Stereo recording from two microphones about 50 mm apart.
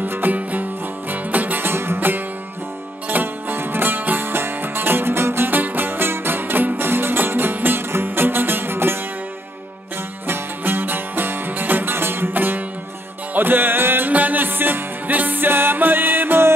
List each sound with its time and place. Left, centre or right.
0.0 s music: right
1.6 s music: right
10.2 s music: right